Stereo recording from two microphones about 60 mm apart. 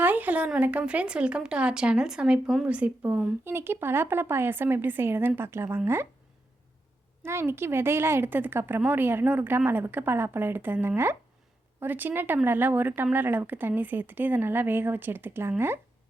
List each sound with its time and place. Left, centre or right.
0.0 s a woman's voice: right
3.4 s speech: right
7.2 s speech: right